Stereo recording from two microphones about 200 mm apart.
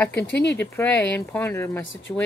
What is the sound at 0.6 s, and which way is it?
Speech, 10° left (ahead or behind).